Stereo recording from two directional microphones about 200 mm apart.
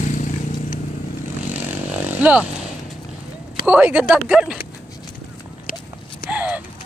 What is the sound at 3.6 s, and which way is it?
Speech, 5° right (ahead or behind).